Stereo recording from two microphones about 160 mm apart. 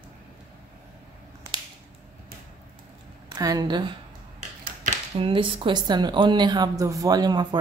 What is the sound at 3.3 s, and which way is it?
Speech, 25° right (ahead or behind).